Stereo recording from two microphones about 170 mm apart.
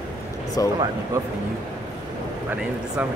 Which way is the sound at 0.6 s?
20° left (ahead or behind).